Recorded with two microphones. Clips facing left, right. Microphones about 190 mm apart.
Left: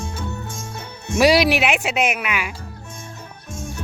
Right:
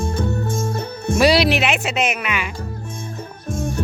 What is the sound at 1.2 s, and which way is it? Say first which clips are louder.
Music: even; 10° left (ahead or behind).